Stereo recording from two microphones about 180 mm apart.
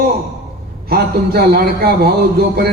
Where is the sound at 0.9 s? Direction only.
60° right (ahead or behind).